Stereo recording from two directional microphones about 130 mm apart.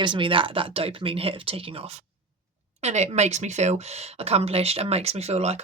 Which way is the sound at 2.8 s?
60° right (ahead or behind).